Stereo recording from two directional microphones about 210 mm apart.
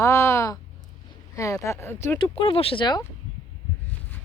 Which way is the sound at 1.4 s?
15° left (ahead or behind).